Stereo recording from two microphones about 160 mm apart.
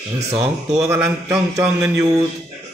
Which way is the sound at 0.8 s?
20° right (ahead or behind).